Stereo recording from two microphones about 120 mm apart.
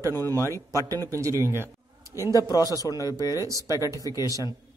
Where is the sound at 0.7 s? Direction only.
30° right (ahead or behind).